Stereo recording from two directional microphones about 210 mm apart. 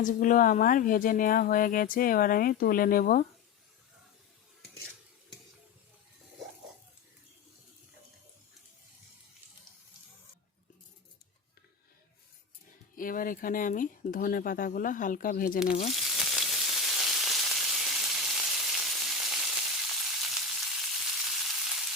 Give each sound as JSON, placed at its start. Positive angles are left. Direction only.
{"t": 0.0, "sound": "speech", "side_deg": 40}
{"t": 13.0, "sound": "speech", "side_deg": 40}
{"t": 15.9, "sound": "frying", "side_deg": 0}